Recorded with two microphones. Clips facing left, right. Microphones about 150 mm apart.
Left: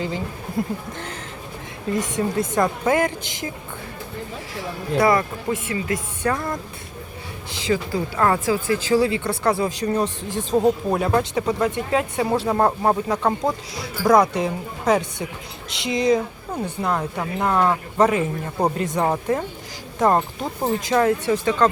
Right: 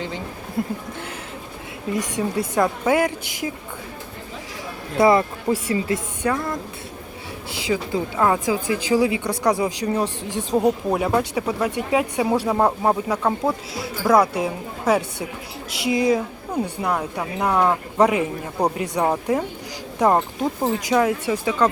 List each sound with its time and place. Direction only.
0.6 s speech: centre (ahead or behind)
1.9 s speech: 10° right (ahead or behind)
4.9 s a man's voice: 25° right (ahead or behind)
6.2 s speech: 10° right (ahead or behind)
7.5 s speech: 10° right (ahead or behind)